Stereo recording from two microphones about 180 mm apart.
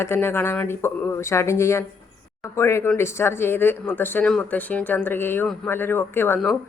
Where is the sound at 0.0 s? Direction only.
15° left (ahead or behind).